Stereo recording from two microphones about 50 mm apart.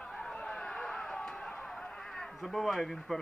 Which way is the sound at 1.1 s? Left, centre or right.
Centre.